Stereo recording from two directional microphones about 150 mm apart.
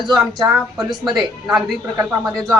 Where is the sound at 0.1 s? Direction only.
25° right (ahead or behind).